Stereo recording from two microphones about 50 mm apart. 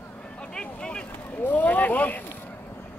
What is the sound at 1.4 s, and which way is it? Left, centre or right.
Speech, left.